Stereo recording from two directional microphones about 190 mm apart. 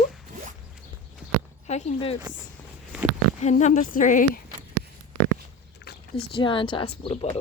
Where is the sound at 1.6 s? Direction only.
35° left (ahead or behind).